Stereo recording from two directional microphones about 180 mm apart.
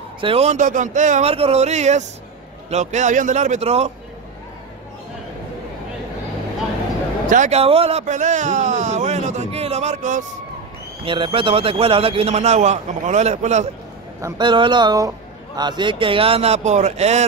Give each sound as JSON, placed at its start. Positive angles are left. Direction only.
{"t": 0.2, "sound": "a man's voice", "side_deg": -35}
{"t": 7.2, "sound": "a man's voice", "side_deg": -40}
{"t": 11.1, "sound": "a man's voice", "side_deg": -30}
{"t": 14.2, "sound": "a man's voice", "side_deg": -25}